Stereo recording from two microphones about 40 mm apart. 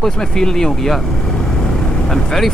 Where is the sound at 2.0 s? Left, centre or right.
Centre.